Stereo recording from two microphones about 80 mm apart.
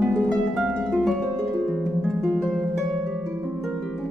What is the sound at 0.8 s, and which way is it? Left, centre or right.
Harp, centre.